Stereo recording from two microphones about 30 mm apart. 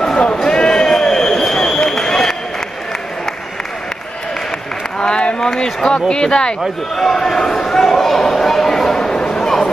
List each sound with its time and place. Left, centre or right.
0.5 s a sound: left
2.0 s run: centre
4.9 s run: left
5.5 s speech: left
7.0 s speech: centre
7.8 s speech: centre; by 9.4 s left
9.4 s a sound: centre